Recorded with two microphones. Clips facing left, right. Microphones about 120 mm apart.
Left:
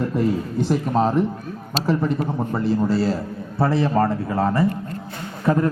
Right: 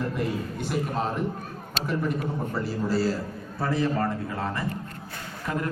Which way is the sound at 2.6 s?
25° left (ahead or behind).